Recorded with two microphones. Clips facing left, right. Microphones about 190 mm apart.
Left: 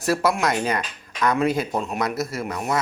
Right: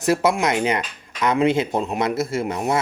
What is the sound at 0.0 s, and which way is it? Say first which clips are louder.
Speech: right 2 dB; 20° right (ahead or behind).